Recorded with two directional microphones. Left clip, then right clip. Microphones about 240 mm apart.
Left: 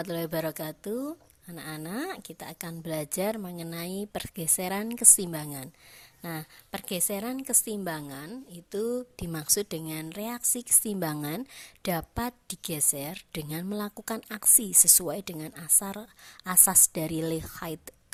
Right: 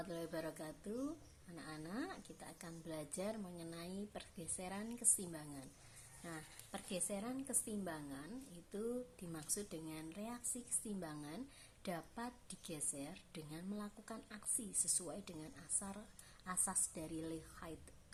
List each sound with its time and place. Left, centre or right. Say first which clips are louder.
0.0 s a woman's voice: left 14 dB; left